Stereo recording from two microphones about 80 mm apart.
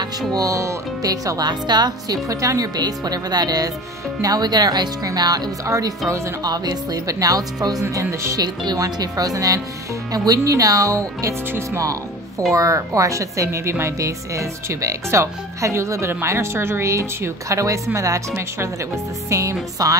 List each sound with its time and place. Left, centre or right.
0.3 s speech: right
1.5 s speech: right
5.7 s a woman's voice: right
6.4 s speech: right
7.9 s a woman's voice: right
8.4 s speech: right
11.8 s music: right
12.5 s a woman's voice: right
19.2 s a woman's voice: right